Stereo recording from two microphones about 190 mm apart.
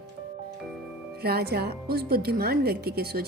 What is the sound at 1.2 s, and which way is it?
A woman's voice, 55° right (ahead or behind).